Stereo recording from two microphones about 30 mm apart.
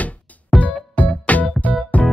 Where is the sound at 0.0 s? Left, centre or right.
Left.